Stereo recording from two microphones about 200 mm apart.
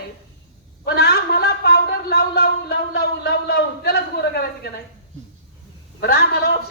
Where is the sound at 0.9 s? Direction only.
55° left (ahead or behind).